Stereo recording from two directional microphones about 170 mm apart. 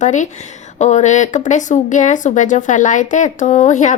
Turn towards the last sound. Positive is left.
turn(degrees=45)  # may be behind; listen again after turning